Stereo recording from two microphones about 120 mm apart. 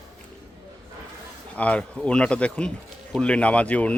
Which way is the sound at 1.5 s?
10° left (ahead or behind).